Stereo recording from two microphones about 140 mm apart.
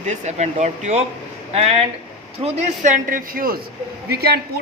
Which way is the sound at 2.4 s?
50° right (ahead or behind).